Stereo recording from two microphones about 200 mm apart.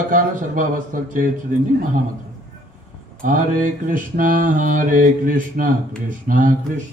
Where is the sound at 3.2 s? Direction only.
40° right (ahead or behind).